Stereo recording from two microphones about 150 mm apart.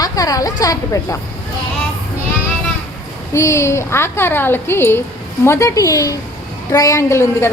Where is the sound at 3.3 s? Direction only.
20° left (ahead or behind).